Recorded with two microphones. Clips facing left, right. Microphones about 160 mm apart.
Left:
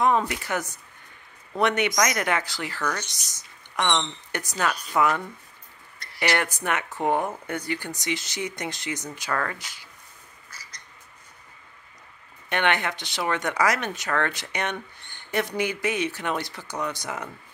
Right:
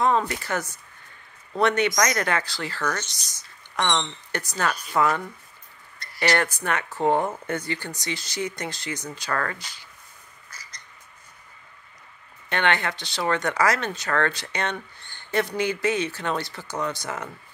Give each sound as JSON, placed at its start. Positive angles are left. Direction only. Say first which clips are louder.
{"t": 0.0, "sound": "speech", "louder": "even", "side_deg": 15}
{"t": 12.4, "sound": "speech", "louder": "even", "side_deg": 15}